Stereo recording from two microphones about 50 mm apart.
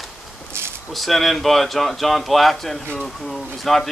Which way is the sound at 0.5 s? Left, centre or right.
Right.